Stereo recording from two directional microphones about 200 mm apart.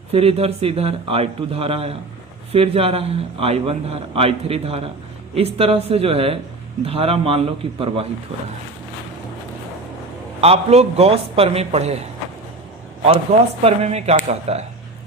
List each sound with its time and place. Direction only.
0.1 s a man's voice: 30° right (ahead or behind)
10.4 s a man's voice: 30° right (ahead or behind)
13.3 s a man's voice: 35° right (ahead or behind)